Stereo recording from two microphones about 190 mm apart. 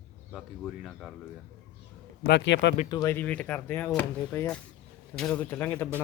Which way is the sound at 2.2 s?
65° left (ahead or behind).